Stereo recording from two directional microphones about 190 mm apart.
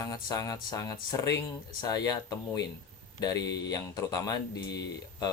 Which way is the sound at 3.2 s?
20° left (ahead or behind).